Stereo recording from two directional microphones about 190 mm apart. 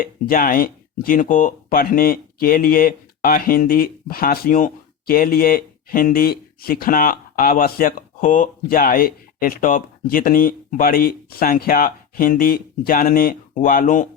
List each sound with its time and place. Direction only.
0.0 s speech: 45° left (ahead or behind)